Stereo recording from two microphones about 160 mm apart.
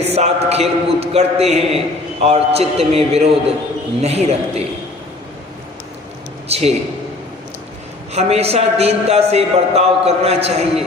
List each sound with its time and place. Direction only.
0.0 s a man's voice: 40° right (ahead or behind)
6.5 s a man's voice: 40° right (ahead or behind)
8.1 s a man's voice: 40° right (ahead or behind)